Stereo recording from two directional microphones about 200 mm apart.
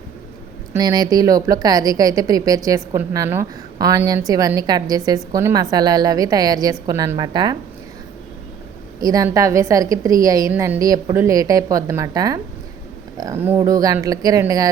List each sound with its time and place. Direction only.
0.7 s a woman's voice: 20° right (ahead or behind)
9.0 s a woman's voice: 20° right (ahead or behind)
13.4 s a woman's voice: 15° right (ahead or behind)